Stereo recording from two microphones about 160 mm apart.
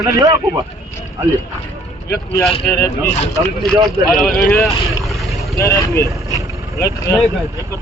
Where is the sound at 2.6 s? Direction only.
10° left (ahead or behind).